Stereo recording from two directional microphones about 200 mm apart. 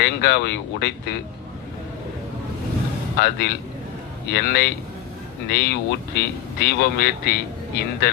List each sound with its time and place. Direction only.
0.0 s speech: 55° left (ahead or behind)
3.2 s speech: 55° left (ahead or behind)